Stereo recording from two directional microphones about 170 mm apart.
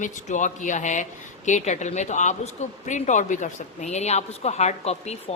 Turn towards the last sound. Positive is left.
turn(degrees=40)  # may be behind; listen again after turning